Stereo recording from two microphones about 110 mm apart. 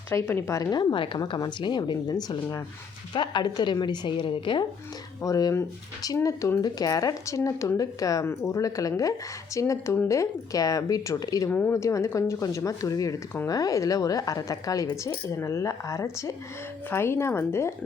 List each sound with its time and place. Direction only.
0.1 s speech: 20° left (ahead or behind)
0.8 s speech: 45° left (ahead or behind)
5.2 s a woman's voice: 30° left (ahead or behind)
11.4 s a woman's voice: 15° left (ahead or behind)